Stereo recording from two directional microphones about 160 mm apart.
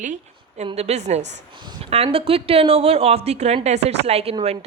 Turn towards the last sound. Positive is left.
turn(degrees=-40)  # may be behind; listen again after turning